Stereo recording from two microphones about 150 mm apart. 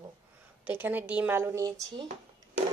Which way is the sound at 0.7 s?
15° right (ahead or behind).